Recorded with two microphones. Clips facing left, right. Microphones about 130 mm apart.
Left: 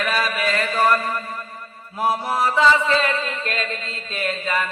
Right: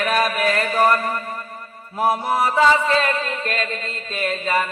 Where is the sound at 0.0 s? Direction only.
50° right (ahead or behind).